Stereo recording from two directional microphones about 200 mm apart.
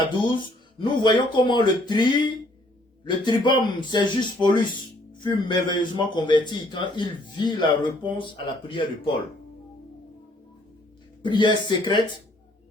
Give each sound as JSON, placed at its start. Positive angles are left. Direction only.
{"t": 0.1, "sound": "a man's voice", "side_deg": 25}
{"t": 11.2, "sound": "a man's voice", "side_deg": 20}